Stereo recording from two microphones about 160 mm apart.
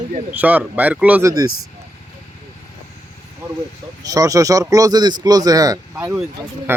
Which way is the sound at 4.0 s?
20° right (ahead or behind).